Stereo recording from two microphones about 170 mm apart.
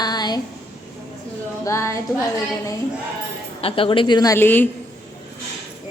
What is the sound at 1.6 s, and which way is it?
Music, 15° left (ahead or behind).